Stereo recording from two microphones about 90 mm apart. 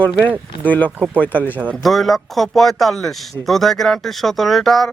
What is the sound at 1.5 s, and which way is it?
Speech, 20° right (ahead or behind).